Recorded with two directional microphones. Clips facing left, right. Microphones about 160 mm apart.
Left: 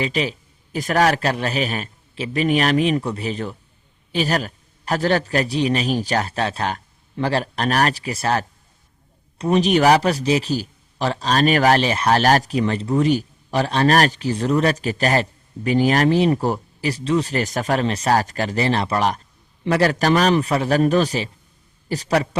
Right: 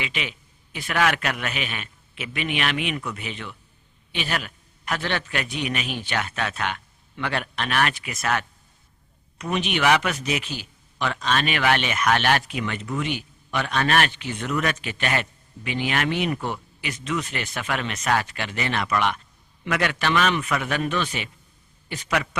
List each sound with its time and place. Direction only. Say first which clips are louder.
0.0 s speech: left 9 dB; 35° left (ahead or behind)